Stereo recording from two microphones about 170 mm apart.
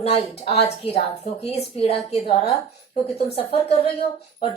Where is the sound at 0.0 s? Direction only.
35° left (ahead or behind).